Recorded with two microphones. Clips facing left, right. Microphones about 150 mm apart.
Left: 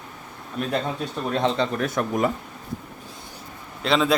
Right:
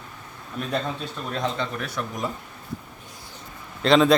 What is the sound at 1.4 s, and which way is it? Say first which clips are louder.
Speech: left 5 dB; 30° left (ahead or behind).